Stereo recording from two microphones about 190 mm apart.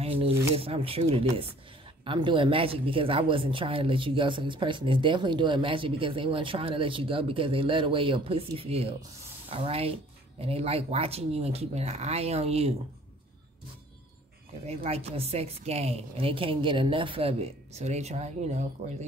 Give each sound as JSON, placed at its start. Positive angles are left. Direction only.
{"t": 0.0, "sound": "a sound", "side_deg": -30}
{"t": 0.6, "sound": "a woman's voice", "side_deg": -30}
{"t": 14.7, "sound": "a woman's voice", "side_deg": -35}